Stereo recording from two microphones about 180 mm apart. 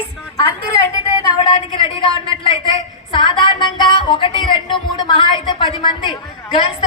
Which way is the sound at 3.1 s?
25° left (ahead or behind).